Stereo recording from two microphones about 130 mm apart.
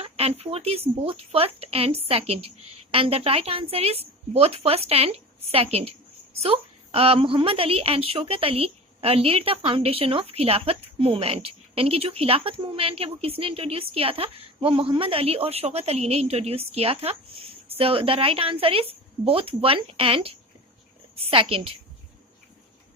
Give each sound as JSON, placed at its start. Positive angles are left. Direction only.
{"t": 0.0, "sound": "a woman's voice", "side_deg": -50}